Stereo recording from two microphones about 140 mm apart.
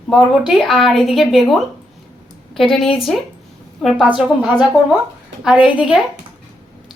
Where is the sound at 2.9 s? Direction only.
Centre (ahead or behind).